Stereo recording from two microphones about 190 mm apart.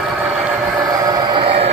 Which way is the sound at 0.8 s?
20° right (ahead or behind).